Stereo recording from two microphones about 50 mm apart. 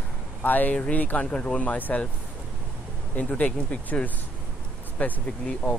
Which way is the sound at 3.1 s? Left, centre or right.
Left.